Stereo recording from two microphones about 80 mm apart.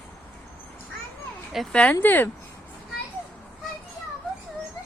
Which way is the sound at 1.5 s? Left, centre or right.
Centre.